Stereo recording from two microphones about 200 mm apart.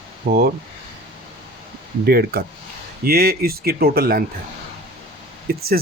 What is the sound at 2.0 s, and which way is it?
Speech, 50° right (ahead or behind).